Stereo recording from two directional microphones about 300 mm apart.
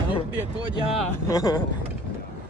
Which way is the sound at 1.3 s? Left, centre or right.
Centre.